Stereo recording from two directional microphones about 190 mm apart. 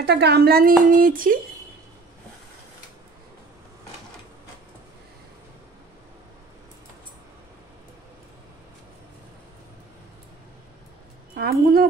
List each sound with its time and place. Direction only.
0.0 s speech: 60° right (ahead or behind)
11.3 s a woman's voice: 55° right (ahead or behind)